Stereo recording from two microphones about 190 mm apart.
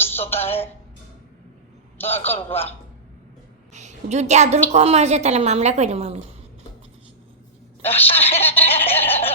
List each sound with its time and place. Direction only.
0.0 s a sound: 10° left (ahead or behind)
2.0 s a man's voice: 10° left (ahead or behind)
3.7 s a woman's voice: 40° right (ahead or behind)
7.8 s a man's voice: 10° left (ahead or behind)